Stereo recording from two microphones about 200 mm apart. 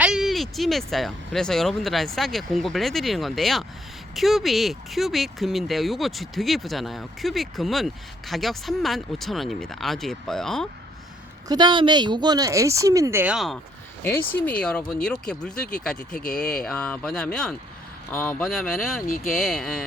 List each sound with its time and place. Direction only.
0.0 s speech: centre (ahead or behind)
11.4 s speech: 20° right (ahead or behind); by 19.0 s centre (ahead or behind)
19.0 s speech: 45° left (ahead or behind)
19.3 s speech: centre (ahead or behind)